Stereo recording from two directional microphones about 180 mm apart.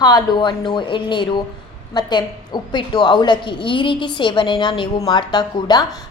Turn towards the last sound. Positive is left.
turn(degrees=25)  # may be behind; listen again after turning